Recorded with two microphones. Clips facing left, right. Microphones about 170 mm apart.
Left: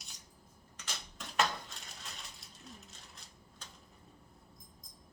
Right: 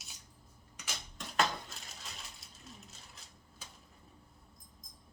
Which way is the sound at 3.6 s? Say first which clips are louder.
Right 1 dB; 5° right (ahead or behind).